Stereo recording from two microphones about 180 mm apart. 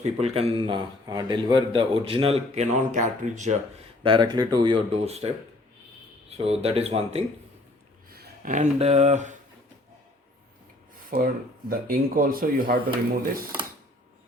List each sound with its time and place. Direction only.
0.0 s a man's voice: 35° right (ahead or behind)
4.0 s speech: 25° right (ahead or behind)
6.3 s a man's voice: 35° right (ahead or behind)
8.1 s speech: 50° right (ahead or behind)
11.1 s speech: 50° right (ahead or behind)